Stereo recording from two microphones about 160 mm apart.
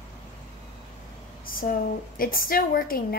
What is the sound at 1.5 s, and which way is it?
A woman's voice, 60° left (ahead or behind).